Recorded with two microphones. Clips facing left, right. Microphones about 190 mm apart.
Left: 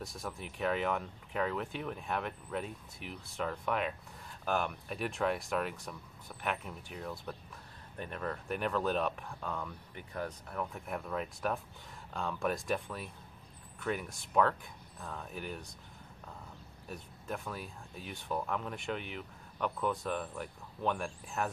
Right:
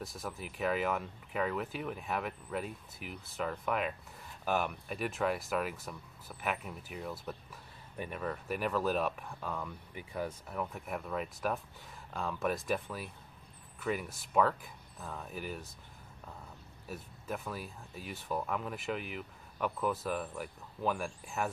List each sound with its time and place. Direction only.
0.0 s speech: centre (ahead or behind)
16.8 s speech: 5° right (ahead or behind)